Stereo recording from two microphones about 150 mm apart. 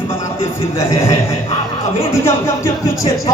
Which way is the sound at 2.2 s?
15° left (ahead or behind).